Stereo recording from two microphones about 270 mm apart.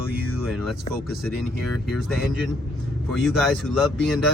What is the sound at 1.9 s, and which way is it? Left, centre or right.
Speech, centre.